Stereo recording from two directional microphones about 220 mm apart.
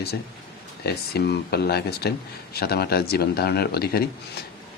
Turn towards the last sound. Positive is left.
turn(degrees=45)  # may be behind; listen again after turning